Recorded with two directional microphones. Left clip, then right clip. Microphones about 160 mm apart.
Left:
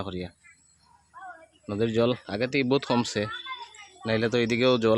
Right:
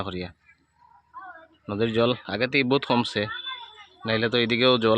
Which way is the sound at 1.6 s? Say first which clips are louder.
Right 2 dB; 10° left (ahead or behind).